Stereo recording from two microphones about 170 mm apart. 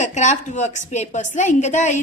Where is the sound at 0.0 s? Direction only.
45° left (ahead or behind).